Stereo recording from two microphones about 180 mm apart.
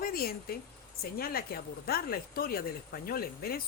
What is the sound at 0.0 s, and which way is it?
Speech, 55° left (ahead or behind).